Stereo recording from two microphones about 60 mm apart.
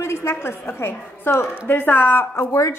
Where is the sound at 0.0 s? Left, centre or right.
Left.